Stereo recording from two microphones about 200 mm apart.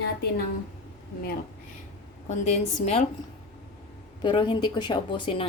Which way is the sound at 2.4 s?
30° left (ahead or behind).